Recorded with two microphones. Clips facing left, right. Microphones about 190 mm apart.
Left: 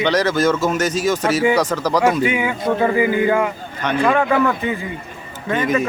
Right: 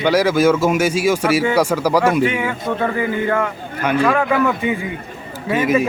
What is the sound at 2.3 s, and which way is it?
Speech, 5° left (ahead or behind).